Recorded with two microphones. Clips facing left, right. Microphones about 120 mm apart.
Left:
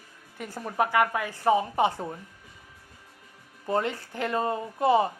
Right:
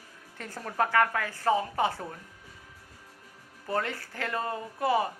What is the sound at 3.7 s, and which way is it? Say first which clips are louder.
Speech: left 4 dB; 20° left (ahead or behind).